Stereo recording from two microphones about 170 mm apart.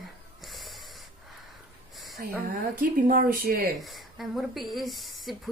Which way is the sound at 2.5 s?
55° right (ahead or behind).